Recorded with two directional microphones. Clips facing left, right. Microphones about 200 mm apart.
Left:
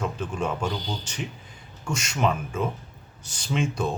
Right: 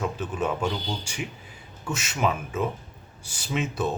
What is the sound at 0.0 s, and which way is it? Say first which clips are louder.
Speech: right 1 dB; 5° right (ahead or behind).